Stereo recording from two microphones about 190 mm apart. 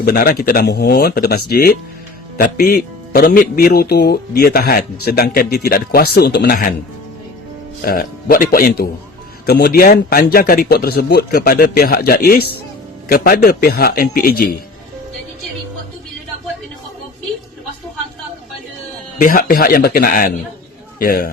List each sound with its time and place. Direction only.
0.0 s speech: 55° left (ahead or behind)
7.9 s speech: 50° left (ahead or behind)
19.2 s speech: 45° left (ahead or behind)